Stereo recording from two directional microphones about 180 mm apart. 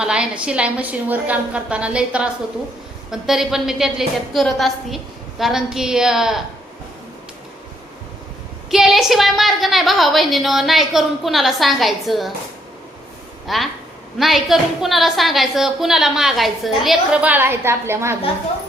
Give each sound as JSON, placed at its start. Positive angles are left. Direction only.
{"t": 0.0, "sound": "a woman's voice", "side_deg": -5}
{"t": 8.7, "sound": "a woman's voice", "side_deg": 0}
{"t": 13.5, "sound": "a woman's voice", "side_deg": 0}